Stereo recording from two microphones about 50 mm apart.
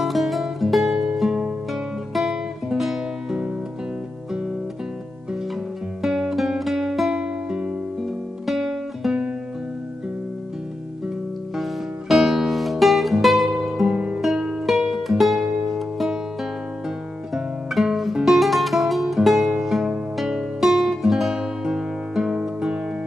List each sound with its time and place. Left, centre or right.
0.0 s music: centre
6.0 s music: centre
8.0 s guitar: centre
11.5 s music: centre
13.8 s music: centre
14.2 s music: centre
17.3 s guitar: centre
18.2 s music: centre